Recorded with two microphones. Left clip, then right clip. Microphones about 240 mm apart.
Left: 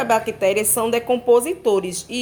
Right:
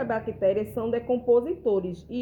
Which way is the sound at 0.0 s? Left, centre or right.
Left.